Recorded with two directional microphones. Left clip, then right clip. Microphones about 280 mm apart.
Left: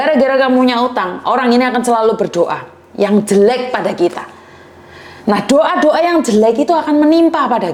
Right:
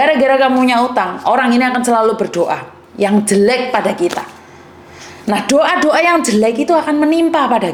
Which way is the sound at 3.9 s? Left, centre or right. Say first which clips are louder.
Left 1 dB; left.